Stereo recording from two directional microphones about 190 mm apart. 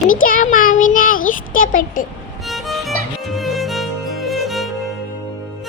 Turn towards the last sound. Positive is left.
turn(degrees=0)  # may be behind; listen again after turning